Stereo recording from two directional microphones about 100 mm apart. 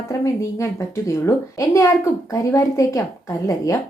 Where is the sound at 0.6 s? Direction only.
30° left (ahead or behind).